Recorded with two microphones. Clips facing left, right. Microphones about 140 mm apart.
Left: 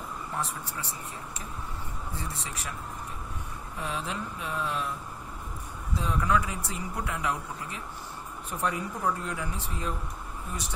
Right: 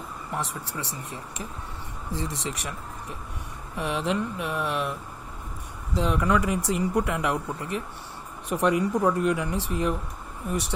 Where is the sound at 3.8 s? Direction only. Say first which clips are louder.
Right 8 dB; 75° right (ahead or behind).